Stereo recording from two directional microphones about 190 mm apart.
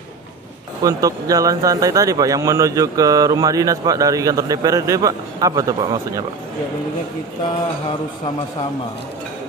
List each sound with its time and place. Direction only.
0.8 s speech: 20° right (ahead or behind)